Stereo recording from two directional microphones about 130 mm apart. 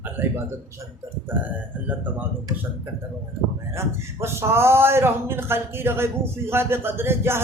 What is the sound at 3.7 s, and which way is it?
Speech, 20° right (ahead or behind).